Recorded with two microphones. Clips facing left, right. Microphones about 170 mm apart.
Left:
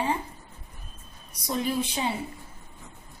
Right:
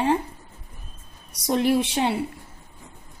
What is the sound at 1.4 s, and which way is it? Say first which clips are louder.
Speech: right 7 dB; 70° right (ahead or behind).